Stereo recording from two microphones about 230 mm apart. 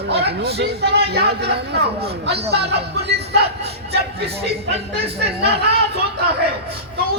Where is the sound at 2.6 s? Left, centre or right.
Right.